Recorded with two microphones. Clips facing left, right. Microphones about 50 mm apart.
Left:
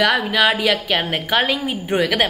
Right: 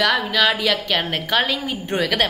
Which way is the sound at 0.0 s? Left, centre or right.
Centre.